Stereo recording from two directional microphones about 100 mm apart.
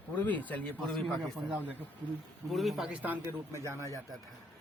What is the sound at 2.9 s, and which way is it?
Speech, 15° right (ahead or behind).